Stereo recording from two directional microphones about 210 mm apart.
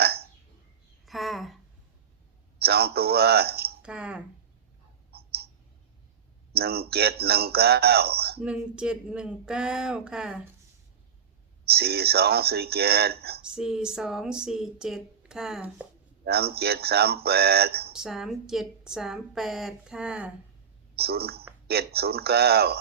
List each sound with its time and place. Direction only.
1.0 s a sound: centre (ahead or behind)
2.6 s speech: 50° right (ahead or behind)
3.8 s speech: 5° right (ahead or behind)
5.1 s clicking: 50° right (ahead or behind)
6.5 s speech: 50° right (ahead or behind)
8.4 s speech: 5° right (ahead or behind)
11.6 s speech: 50° right (ahead or behind)
13.5 s speech: 5° right (ahead or behind)
16.2 s speech: 50° right (ahead or behind)
17.9 s speech: centre (ahead or behind)
20.9 s speech: 50° right (ahead or behind)